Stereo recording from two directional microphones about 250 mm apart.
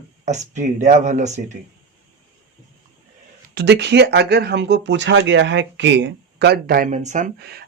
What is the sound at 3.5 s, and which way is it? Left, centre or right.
Speech, right.